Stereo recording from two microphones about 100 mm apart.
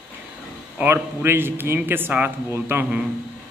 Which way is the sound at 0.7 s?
20° right (ahead or behind).